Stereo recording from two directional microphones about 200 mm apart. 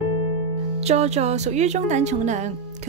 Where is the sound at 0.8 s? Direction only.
35° right (ahead or behind).